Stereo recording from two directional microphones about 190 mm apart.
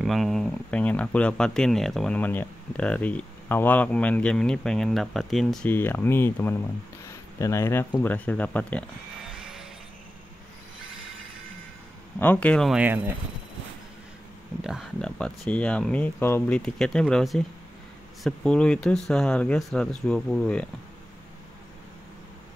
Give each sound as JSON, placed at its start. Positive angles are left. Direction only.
{"t": 0.0, "sound": "speech", "side_deg": 0}
{"t": 9.4, "sound": "music", "side_deg": -5}
{"t": 12.2, "sound": "speech", "side_deg": 10}
{"t": 14.6, "sound": "speech", "side_deg": 0}